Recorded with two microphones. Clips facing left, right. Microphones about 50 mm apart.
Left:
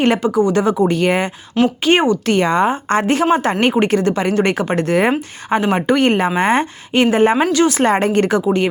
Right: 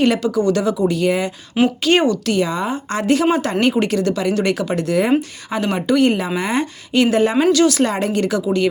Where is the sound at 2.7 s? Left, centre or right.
Left.